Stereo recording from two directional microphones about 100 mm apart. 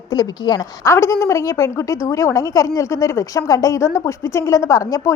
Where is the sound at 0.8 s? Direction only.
30° left (ahead or behind).